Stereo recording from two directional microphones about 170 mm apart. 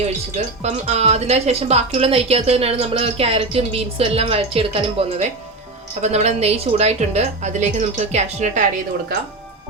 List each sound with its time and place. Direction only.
0.0 s speech: 40° right (ahead or behind)